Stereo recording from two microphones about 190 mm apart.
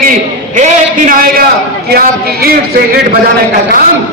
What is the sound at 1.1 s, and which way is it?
A man's voice, 45° right (ahead or behind).